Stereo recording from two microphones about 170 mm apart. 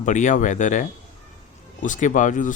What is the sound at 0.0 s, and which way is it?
Speech, 50° left (ahead or behind).